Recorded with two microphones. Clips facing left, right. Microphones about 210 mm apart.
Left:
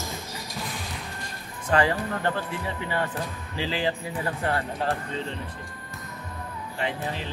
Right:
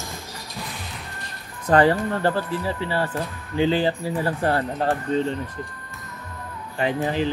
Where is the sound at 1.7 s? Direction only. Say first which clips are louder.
Right 6 dB; 35° right (ahead or behind).